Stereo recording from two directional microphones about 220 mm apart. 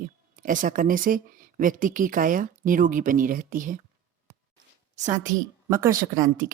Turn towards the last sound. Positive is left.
turn(degrees=-15)  # may be behind; listen again after turning